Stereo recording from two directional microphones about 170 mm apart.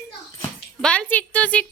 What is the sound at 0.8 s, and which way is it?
Speech, 5° left (ahead or behind).